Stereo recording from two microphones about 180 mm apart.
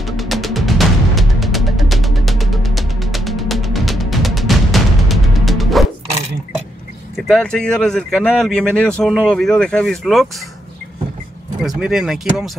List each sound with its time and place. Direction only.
0.0 s music: centre (ahead or behind)
7.2 s speech: 5° left (ahead or behind)
11.6 s speech: centre (ahead or behind)